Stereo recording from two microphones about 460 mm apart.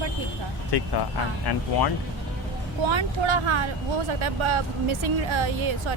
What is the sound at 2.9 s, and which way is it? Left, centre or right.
Speech, right.